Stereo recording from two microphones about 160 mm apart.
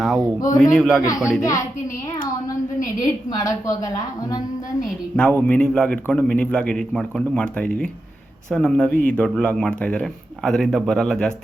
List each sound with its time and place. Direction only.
0.0 s a sound: centre (ahead or behind)
0.3 s a woman's voice: 20° left (ahead or behind)
0.7 s speech: 5° left (ahead or behind)
1.0 s a woman's voice: 20° left (ahead or behind)
3.0 s a woman's voice: 20° left (ahead or behind)
5.1 s a man's voice: 10° left (ahead or behind)